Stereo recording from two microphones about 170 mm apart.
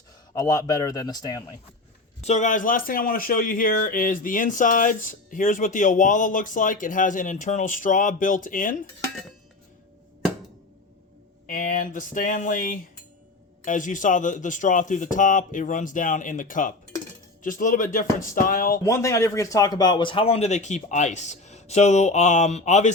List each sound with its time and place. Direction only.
0.3 s a man's voice: 20° left (ahead or behind)
2.2 s speech: 45° left (ahead or behind)
11.4 s speech: 50° left (ahead or behind)
18.8 s speech: 15° left (ahead or behind); by 22.9 s 45° left (ahead or behind)